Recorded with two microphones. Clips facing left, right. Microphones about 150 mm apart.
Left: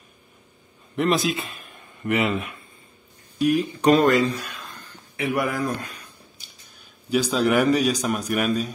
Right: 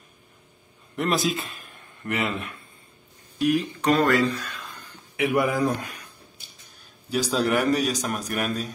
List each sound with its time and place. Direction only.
0.9 s speech: centre (ahead or behind)
3.8 s speech: 20° left (ahead or behind)
5.1 s speech: 15° right (ahead or behind)
7.1 s a man's voice: centre (ahead or behind)